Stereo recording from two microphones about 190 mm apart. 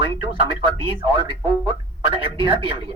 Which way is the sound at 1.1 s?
25° right (ahead or behind).